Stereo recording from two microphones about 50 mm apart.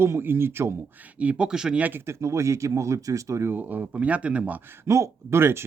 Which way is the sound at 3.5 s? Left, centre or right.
Right.